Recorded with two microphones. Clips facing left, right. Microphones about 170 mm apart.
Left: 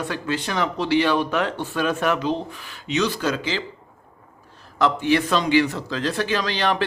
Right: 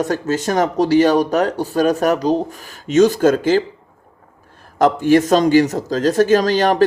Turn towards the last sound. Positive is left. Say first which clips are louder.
# right 9 dB
turn(degrees=-45)  # may be behind; listen again after turning